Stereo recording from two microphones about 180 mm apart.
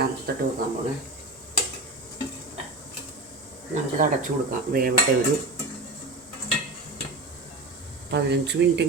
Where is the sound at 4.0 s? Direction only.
45° right (ahead or behind).